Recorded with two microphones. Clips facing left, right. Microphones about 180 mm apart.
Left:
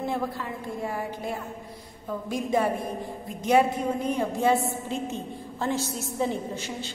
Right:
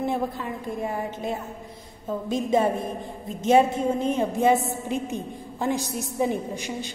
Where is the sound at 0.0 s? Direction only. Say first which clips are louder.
Right 3 dB; 20° right (ahead or behind).